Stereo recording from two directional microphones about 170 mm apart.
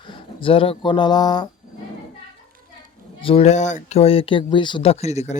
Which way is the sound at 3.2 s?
35° left (ahead or behind).